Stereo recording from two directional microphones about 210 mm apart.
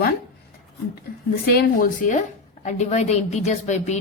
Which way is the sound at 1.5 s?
40° left (ahead or behind).